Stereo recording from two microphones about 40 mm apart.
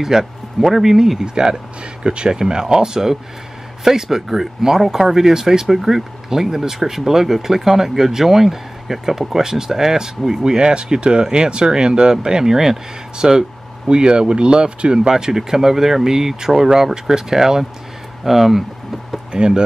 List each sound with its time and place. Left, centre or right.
0.0 s speech: centre
1.2 s speech: centre
19.3 s speech: right